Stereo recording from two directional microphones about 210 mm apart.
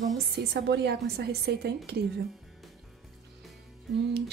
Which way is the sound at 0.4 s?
50° right (ahead or behind).